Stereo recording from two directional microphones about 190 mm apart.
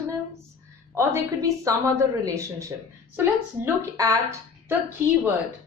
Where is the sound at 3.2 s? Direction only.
15° right (ahead or behind).